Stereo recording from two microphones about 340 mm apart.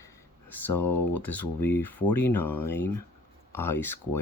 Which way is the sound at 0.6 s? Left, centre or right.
Centre.